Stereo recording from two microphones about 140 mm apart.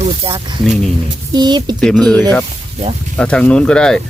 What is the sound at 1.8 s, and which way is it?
Speech, 5° left (ahead or behind).